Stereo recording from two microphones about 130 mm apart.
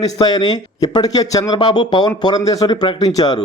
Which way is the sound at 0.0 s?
35° left (ahead or behind).